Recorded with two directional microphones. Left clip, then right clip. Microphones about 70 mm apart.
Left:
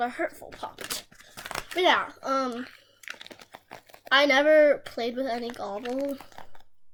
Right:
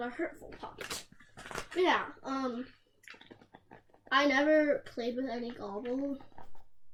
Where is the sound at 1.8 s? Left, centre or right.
Left.